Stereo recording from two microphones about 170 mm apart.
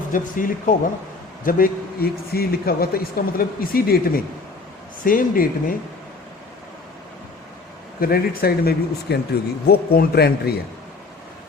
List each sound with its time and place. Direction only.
0.1 s a man's voice: 50° left (ahead or behind)
8.0 s a man's voice: 60° left (ahead or behind)